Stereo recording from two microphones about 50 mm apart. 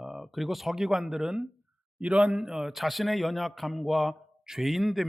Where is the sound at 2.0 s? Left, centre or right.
Right.